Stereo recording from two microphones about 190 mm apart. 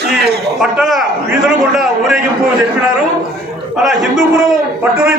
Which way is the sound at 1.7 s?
Centre (ahead or behind).